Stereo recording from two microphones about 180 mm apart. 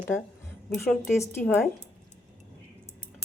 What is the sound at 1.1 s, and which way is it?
Speech, 15° left (ahead or behind).